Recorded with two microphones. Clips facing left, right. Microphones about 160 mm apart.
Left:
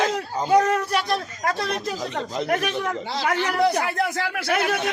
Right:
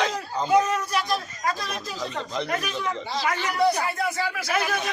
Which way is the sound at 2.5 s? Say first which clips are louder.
Left 4 dB; 65° left (ahead or behind).